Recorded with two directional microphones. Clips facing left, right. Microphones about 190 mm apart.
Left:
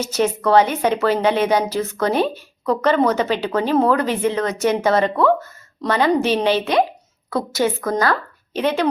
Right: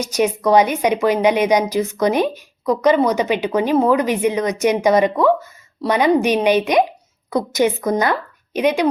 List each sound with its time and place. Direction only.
0.0 s a woman's voice: 15° right (ahead or behind)